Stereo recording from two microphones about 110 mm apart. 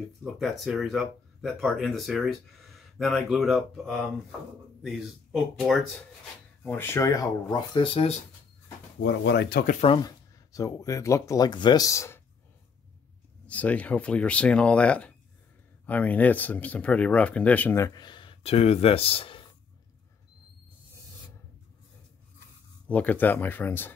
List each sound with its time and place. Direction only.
0.2 s speech: centre (ahead or behind)
6.6 s speech: 20° left (ahead or behind); by 8.1 s 50° left (ahead or behind)
10.0 s speech: 30° left (ahead or behind)
13.5 s speech: 10° left (ahead or behind)
17.9 s speech: 45° left (ahead or behind)
22.8 s speech: 15° left (ahead or behind)